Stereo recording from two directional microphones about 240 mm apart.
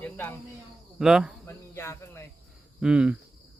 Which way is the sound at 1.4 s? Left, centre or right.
Centre.